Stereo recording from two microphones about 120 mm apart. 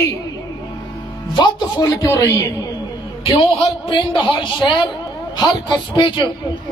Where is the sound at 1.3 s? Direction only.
35° left (ahead or behind).